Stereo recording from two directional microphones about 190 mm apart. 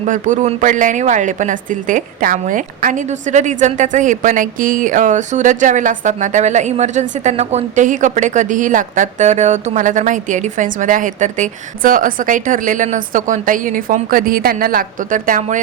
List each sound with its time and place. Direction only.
0.0 s a woman's voice: 40° right (ahead or behind)